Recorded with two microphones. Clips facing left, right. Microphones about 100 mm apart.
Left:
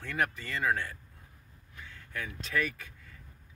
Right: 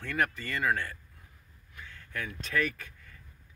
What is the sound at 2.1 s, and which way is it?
Speech, 15° left (ahead or behind).